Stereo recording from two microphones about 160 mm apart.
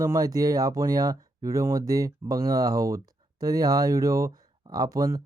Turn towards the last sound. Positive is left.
turn(degrees=-20)  # may be behind; listen again after turning